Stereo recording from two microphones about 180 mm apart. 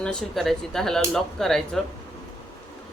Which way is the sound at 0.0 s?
5° left (ahead or behind).